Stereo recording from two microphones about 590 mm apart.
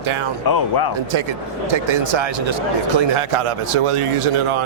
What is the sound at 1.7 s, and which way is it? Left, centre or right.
A man's voice, right.